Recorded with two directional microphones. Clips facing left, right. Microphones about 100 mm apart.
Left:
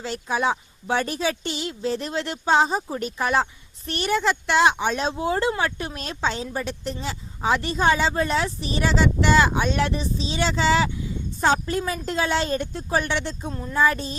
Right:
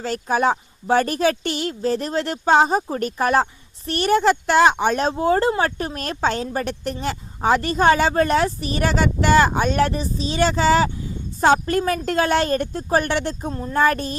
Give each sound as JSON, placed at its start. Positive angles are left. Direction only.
{"t": 0.0, "sound": "speech", "side_deg": -45}
{"t": 13.7, "sound": "music", "side_deg": -55}